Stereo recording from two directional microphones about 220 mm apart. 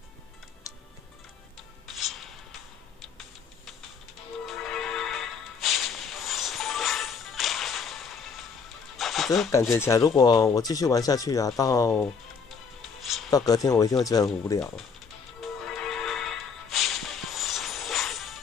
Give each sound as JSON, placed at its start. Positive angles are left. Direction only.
{"t": 0.7, "sound": "music", "side_deg": 15}
{"t": 2.0, "sound": "music", "side_deg": 0}
{"t": 4.5, "sound": "music", "side_deg": 0}
{"t": 9.7, "sound": "speech", "side_deg": 15}
{"t": 13.0, "sound": "music", "side_deg": 0}
{"t": 13.3, "sound": "speech", "side_deg": 15}
{"t": 15.4, "sound": "music", "side_deg": 0}